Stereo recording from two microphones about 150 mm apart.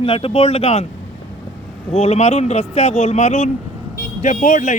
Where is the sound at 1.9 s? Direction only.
45° left (ahead or behind).